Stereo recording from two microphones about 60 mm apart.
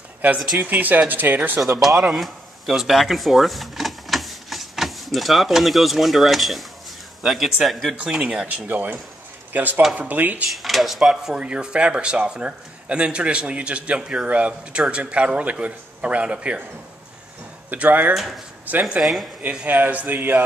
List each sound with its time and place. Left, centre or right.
0.2 s speech: right
2.1 s speech: centre
8.0 s speech: centre
8.5 s speech: right
10.6 s speech: centre
11.3 s speech: centre
17.6 s speech: right
18.9 s speech: centre
19.5 s speech: right